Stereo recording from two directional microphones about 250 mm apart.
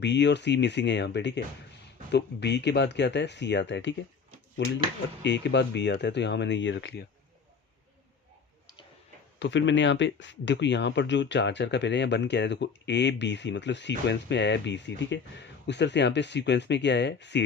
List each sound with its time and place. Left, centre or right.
0.0 s speech: left
9.4 s speech: left